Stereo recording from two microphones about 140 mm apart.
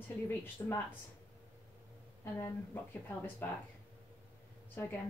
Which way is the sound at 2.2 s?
20° left (ahead or behind).